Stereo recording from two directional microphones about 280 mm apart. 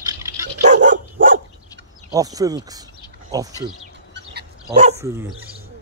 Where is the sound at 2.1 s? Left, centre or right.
Centre.